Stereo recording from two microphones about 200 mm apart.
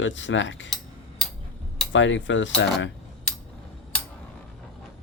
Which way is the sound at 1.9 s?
70° left (ahead or behind).